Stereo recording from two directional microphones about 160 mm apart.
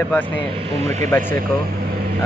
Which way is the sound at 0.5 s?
40° right (ahead or behind).